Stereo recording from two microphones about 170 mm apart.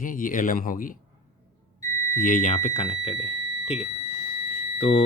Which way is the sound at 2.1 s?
50° left (ahead or behind).